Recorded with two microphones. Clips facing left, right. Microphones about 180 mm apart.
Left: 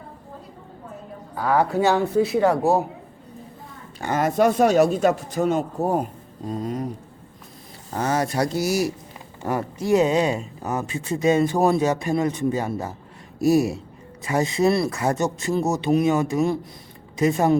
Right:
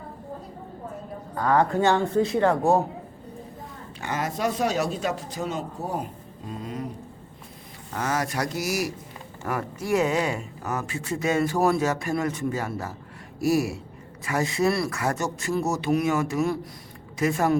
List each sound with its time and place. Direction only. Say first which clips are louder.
1.4 s speech: left 1 dB; 10° left (ahead or behind)
4.0 s speech: left 8 dB; 50° left (ahead or behind)
7.9 s speech: left 5 dB; 30° left (ahead or behind)